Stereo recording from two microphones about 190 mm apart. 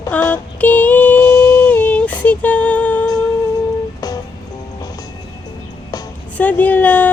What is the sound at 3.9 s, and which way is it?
Music, 20° left (ahead or behind).